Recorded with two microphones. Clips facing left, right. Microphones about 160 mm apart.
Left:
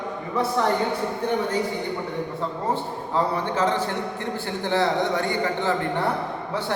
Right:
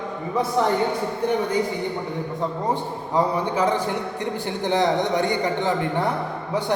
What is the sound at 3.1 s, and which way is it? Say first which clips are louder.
A man's voice: right 2 dB; 15° right (ahead or behind).